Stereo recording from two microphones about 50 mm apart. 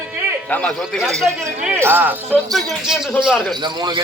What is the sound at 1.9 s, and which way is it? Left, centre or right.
Speech, right.